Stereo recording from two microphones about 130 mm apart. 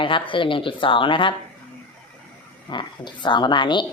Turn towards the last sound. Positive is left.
turn(degrees=35)  # may be behind; listen again after turning